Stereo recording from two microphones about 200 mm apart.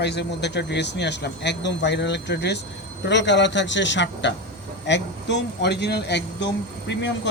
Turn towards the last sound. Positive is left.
turn(degrees=60)  # may be behind; listen again after turning